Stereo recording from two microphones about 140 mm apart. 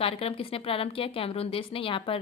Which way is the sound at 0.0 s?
45° left (ahead or behind).